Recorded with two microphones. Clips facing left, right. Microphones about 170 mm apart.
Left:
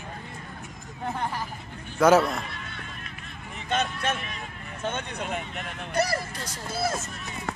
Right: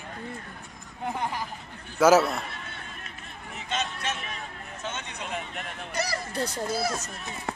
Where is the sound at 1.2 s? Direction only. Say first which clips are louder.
Even; 15° right (ahead or behind).